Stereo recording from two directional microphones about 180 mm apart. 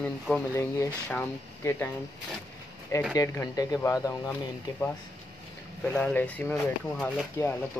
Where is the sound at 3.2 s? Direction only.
20° left (ahead or behind).